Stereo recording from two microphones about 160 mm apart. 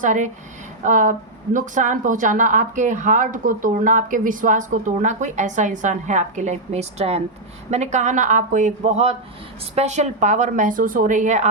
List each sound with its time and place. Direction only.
0.0 s speech: 50° right (ahead or behind)